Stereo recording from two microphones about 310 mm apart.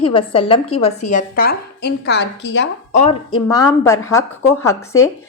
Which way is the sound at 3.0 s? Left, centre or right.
Centre.